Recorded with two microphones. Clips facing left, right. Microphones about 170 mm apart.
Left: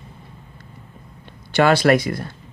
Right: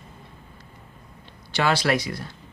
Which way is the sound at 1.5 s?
55° left (ahead or behind).